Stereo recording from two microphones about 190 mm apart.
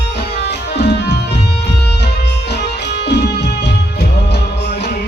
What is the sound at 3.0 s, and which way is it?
Music, 65° left (ahead or behind).